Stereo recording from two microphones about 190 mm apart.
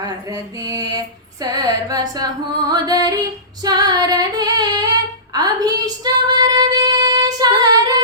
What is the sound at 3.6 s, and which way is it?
Female singing, 20° right (ahead or behind).